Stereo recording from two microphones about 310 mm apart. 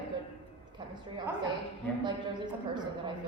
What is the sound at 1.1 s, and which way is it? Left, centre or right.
A man's voice, centre.